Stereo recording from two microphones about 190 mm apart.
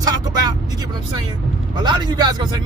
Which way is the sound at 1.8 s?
20° right (ahead or behind).